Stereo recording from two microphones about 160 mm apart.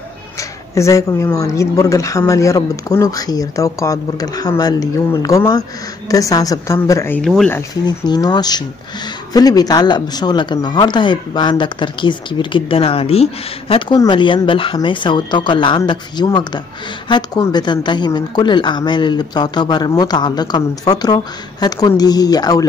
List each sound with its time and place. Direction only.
0.4 s speech: 20° left (ahead or behind)
7.2 s speech: 5° left (ahead or behind)
7.8 s speech: 25° left (ahead or behind)